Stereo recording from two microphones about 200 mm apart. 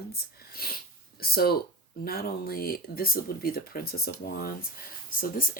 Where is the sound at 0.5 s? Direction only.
50° left (ahead or behind).